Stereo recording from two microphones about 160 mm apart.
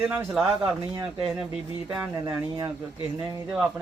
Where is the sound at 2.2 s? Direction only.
20° right (ahead or behind).